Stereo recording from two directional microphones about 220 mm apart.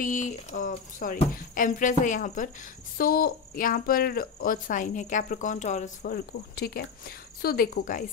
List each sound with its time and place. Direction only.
0.0 s speech: 35° left (ahead or behind)
6.1 s speech: 45° left (ahead or behind)